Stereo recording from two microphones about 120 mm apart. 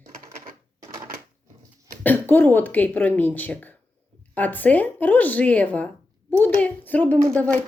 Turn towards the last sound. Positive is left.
turn(degrees=5)  # may be behind; listen again after turning